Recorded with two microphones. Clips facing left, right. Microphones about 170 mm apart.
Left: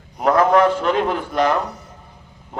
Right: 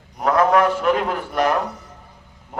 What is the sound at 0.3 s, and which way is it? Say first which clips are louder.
A man's voice: left 2 dB; centre (ahead or behind).